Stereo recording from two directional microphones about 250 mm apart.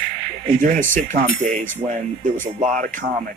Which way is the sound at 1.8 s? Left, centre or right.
Centre.